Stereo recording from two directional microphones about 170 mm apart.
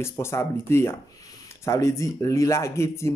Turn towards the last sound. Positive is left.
turn(degrees=15)  # may be behind; listen again after turning